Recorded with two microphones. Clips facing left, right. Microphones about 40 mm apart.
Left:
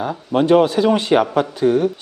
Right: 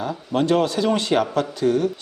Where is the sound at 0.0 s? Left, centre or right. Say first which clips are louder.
Left 4 dB; centre.